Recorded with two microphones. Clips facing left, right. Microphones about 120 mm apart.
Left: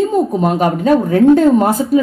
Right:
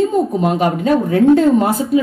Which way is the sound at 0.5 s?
45° left (ahead or behind).